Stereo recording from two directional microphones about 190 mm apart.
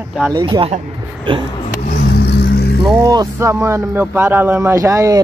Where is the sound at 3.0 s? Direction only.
20° right (ahead or behind).